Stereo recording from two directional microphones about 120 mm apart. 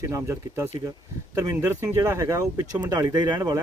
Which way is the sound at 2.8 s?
35° right (ahead or behind).